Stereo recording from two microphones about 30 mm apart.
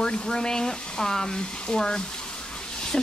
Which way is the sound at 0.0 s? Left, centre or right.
Left.